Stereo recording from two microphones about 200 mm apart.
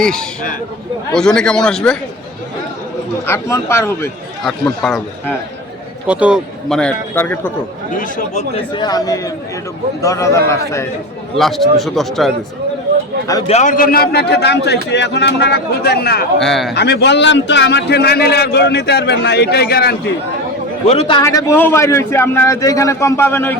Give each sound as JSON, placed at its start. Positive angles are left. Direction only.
{"t": 0.0, "sound": "a man's voice", "side_deg": 5}
{"t": 3.2, "sound": "a man's voice", "side_deg": 15}
{"t": 4.4, "sound": "a man's voice", "side_deg": 0}
{"t": 6.1, "sound": "a man's voice", "side_deg": -5}
{"t": 7.9, "sound": "speech", "side_deg": 40}
{"t": 8.7, "sound": "a man's voice", "side_deg": 20}
{"t": 11.3, "sound": "a man's voice", "side_deg": 0}
{"t": 13.5, "sound": "a man's voice", "side_deg": 35}
{"t": 16.4, "sound": "a man's voice", "side_deg": 0}
{"t": 16.7, "sound": "a man's voice", "side_deg": 55}
{"t": 20.8, "sound": "speech", "side_deg": 30}
{"t": 21.2, "sound": "a man's voice", "side_deg": 15}